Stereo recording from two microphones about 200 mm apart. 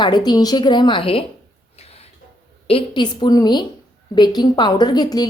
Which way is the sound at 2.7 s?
25° left (ahead or behind).